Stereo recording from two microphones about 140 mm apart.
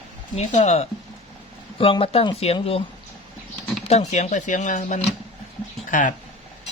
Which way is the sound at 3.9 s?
50° left (ahead or behind).